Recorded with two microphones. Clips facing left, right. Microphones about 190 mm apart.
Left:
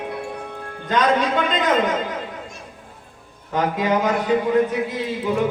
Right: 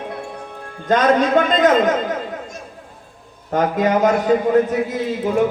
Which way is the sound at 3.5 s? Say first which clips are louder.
Right 3 dB; 45° right (ahead or behind).